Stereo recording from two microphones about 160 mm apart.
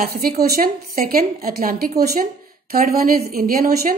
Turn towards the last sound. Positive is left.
turn(degrees=-65)  # may be behind; listen again after turning